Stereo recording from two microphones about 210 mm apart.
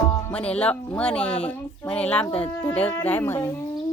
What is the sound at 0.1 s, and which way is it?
Speech, 5° left (ahead or behind).